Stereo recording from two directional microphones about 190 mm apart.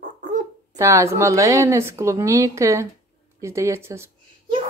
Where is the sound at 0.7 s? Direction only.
15° right (ahead or behind).